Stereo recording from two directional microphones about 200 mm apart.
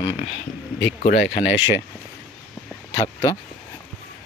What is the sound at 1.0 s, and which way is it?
Speech, 40° left (ahead or behind).